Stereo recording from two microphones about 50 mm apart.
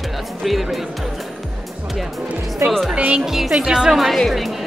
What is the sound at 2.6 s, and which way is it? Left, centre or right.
Speech, right.